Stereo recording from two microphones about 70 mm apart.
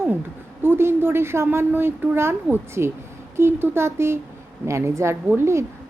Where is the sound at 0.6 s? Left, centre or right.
Right.